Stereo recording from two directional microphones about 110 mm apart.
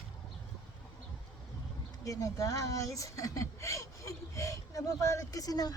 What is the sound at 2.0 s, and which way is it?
A woman's voice, 30° left (ahead or behind).